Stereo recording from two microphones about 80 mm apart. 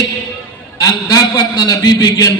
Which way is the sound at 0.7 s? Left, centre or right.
Left.